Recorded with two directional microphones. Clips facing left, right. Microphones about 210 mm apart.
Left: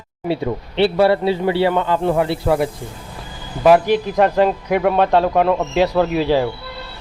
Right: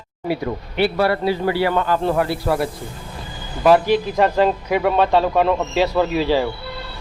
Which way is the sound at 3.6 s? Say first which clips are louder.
Left 2 dB; 5° left (ahead or behind).